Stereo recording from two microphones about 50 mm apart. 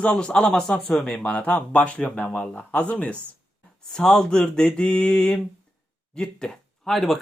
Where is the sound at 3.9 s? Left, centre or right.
Centre.